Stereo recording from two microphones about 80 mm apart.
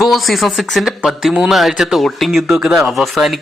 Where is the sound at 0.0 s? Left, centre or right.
Centre.